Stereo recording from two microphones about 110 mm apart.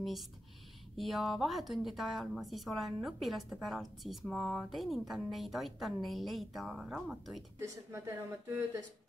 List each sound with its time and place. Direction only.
0.0 s a woman's voice: centre (ahead or behind)
7.5 s speech: 25° right (ahead or behind)